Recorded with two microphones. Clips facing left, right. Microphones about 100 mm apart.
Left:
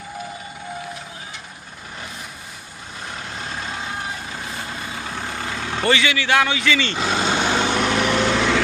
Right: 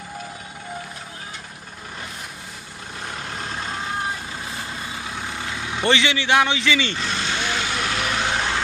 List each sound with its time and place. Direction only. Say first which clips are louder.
5.9 s a man's voice: even; 25° right (ahead or behind)
6.9 s vehicle: left 5 dB; 50° left (ahead or behind); by 8.6 s 90° left